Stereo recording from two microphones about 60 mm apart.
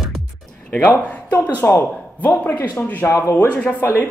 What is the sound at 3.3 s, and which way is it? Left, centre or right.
Speech, left.